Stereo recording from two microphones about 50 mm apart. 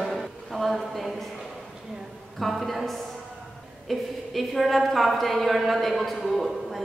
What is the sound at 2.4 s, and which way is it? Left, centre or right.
A man's voice, centre.